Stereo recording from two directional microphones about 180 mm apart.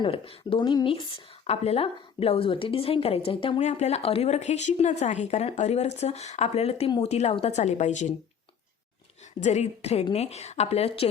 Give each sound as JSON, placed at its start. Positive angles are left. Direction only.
{"t": 0.0, "sound": "speech", "side_deg": 30}
{"t": 9.4, "sound": "speech", "side_deg": 40}